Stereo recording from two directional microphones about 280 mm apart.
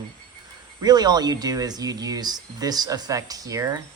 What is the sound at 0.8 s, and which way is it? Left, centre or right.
Speech, centre.